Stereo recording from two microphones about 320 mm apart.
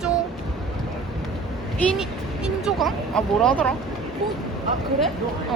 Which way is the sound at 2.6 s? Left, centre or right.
Centre.